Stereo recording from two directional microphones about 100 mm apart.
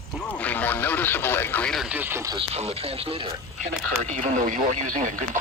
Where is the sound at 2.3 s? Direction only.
90° right; by 3.3 s 70° right (ahead or behind).